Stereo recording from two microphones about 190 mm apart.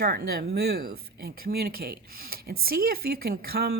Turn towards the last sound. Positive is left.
turn(degrees=-55)  # may be behind; listen again after turning